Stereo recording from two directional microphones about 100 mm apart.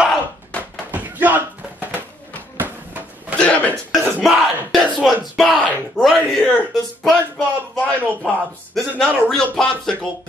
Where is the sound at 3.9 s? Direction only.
Centre (ahead or behind).